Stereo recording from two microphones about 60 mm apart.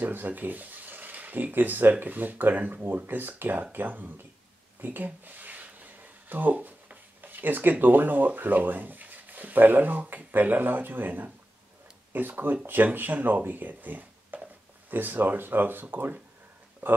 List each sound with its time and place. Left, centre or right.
0.0 s speech: right
4.8 s a sound: right
7.8 s speech: right